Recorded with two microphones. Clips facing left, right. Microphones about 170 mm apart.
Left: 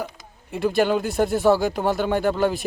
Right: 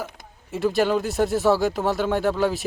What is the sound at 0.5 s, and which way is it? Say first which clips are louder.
Speech: left 1 dB; centre (ahead or behind).